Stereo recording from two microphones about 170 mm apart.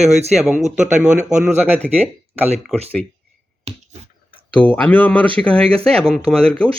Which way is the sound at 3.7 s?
35° right (ahead or behind).